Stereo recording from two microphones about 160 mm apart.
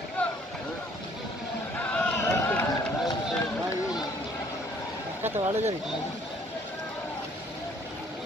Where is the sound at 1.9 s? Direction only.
10° left (ahead or behind).